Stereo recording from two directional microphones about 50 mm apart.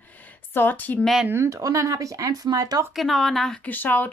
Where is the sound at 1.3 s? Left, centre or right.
Right.